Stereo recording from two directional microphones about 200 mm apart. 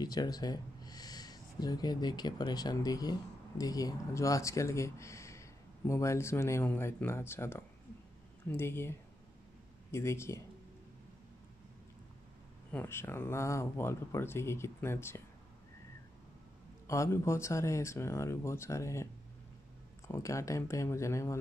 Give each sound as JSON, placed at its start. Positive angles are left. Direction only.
{"t": 0.0, "sound": "speech", "side_deg": 20}
{"t": 12.7, "sound": "speech", "side_deg": 10}
{"t": 16.8, "sound": "speech", "side_deg": 15}
{"t": 20.1, "sound": "speech", "side_deg": 15}